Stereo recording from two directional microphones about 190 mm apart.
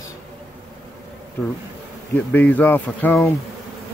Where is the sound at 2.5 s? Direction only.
10° left (ahead or behind).